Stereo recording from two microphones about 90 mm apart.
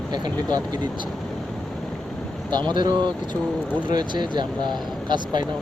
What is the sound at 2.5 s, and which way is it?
Speech, 55° right (ahead or behind).